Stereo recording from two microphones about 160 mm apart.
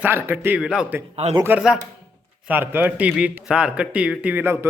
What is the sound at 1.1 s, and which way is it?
Speech, 40° right (ahead or behind).